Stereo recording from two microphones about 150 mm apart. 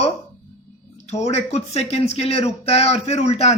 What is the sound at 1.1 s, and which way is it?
Speech, 45° left (ahead or behind).